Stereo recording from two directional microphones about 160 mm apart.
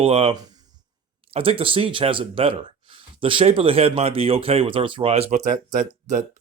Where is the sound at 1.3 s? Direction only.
35° right (ahead or behind); by 5.9 s 55° right (ahead or behind).